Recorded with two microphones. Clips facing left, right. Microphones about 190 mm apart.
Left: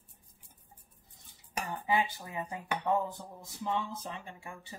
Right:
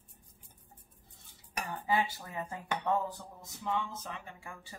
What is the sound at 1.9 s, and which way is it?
Cutlery, 15° left (ahead or behind).